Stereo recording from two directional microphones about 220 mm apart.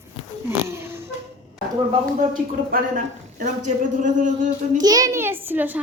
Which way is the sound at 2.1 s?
40° right (ahead or behind).